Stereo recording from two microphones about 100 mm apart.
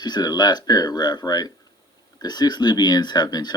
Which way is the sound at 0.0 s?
45° left (ahead or behind).